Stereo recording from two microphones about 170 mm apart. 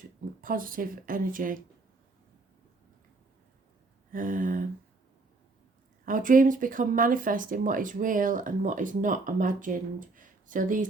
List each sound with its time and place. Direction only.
0.4 s speech: 55° right (ahead or behind)
4.1 s speech: 55° right (ahead or behind)
6.1 s speech: 50° right (ahead or behind)